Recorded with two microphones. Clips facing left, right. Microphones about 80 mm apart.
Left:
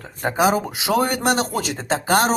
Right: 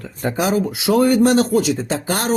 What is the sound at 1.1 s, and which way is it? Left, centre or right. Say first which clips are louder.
Speech: right 6 dB; left.